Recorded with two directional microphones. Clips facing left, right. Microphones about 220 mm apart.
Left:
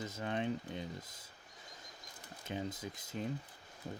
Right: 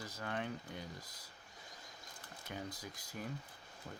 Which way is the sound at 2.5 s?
25° left (ahead or behind).